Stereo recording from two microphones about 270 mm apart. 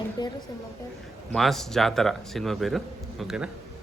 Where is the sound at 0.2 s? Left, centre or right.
Centre.